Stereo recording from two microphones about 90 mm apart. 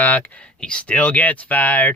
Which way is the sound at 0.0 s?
15° left (ahead or behind).